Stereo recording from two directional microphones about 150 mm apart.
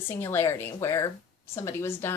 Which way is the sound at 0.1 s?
15° left (ahead or behind).